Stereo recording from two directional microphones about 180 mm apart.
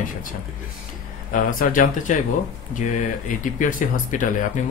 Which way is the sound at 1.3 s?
50° left (ahead or behind).